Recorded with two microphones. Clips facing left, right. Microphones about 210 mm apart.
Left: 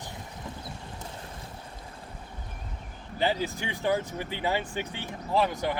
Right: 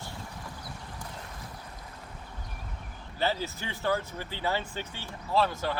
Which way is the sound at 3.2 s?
15° left (ahead or behind).